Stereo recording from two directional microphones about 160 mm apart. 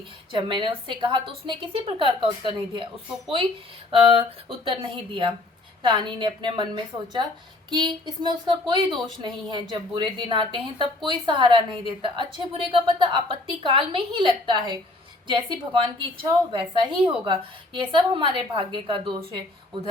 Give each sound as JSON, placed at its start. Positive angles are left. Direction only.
{"t": 0.3, "sound": "a woman's voice", "side_deg": -30}
{"t": 3.9, "sound": "a woman's voice", "side_deg": -35}